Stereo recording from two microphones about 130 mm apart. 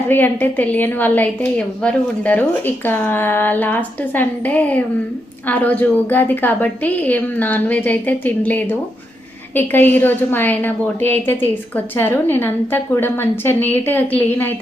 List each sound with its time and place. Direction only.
0.1 s a woman's voice: 15° left (ahead or behind)